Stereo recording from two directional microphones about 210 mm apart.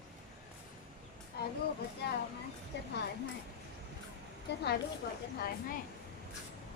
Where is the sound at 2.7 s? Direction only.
55° left (ahead or behind).